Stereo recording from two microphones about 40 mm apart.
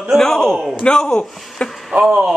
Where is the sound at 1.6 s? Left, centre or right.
Left.